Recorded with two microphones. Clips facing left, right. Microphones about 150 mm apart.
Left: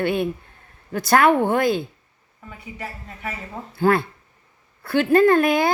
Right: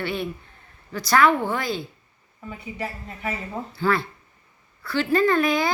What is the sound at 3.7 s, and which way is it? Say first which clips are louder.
Speech: left 5 dB; 50° left (ahead or behind).